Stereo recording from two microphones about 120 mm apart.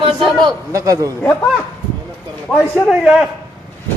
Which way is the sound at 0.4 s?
30° right (ahead or behind).